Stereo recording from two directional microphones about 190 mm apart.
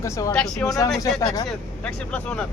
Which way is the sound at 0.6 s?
20° left (ahead or behind).